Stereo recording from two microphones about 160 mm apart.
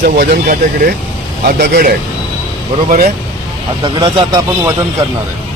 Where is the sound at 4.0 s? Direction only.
25° right (ahead or behind).